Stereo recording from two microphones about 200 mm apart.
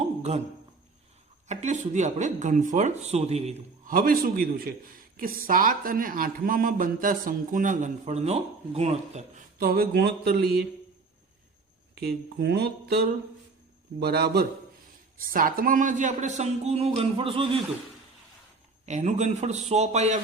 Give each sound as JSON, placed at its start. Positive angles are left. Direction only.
{"t": 0.2, "sound": "a sound", "side_deg": -35}
{"t": 1.5, "sound": "speech", "side_deg": -35}
{"t": 3.9, "sound": "speech", "side_deg": -45}
{"t": 9.6, "sound": "speech", "side_deg": -50}
{"t": 11.9, "sound": "speech", "side_deg": -55}
{"t": 18.9, "sound": "speech", "side_deg": -35}